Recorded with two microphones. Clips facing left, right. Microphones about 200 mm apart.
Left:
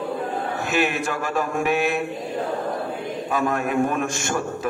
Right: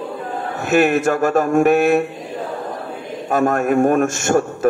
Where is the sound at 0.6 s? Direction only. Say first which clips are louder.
Right 10 dB; 50° right (ahead or behind).